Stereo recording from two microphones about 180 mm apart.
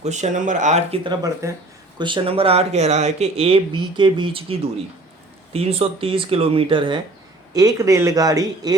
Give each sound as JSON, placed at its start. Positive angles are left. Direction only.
{"t": 0.0, "sound": "speech", "side_deg": -40}
{"t": 1.0, "sound": "speech", "side_deg": -20}